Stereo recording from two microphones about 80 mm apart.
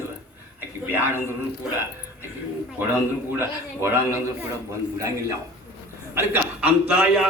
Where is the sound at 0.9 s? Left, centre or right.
Right.